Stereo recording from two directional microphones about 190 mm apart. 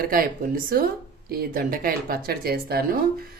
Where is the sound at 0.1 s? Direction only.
50° right (ahead or behind).